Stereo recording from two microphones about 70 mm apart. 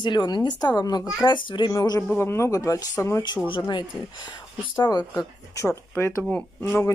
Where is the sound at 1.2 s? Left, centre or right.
Left.